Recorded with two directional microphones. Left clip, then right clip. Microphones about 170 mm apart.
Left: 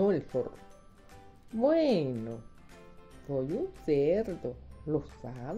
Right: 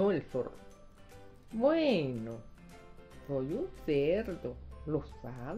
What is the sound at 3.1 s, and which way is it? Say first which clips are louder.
Music: left 2 dB; 5° left (ahead or behind).